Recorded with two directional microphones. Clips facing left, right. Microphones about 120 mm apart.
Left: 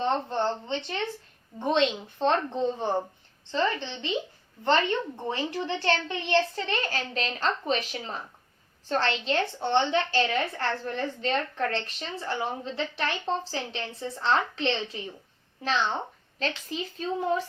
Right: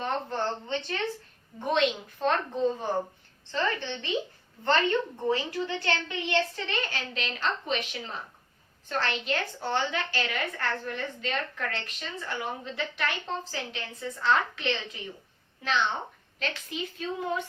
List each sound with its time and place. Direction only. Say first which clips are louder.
0.0 s a woman's voice: left 4 dB; 25° left (ahead or behind)
5.3 s a woman's voice: right 1 dB; 30° left (ahead or behind)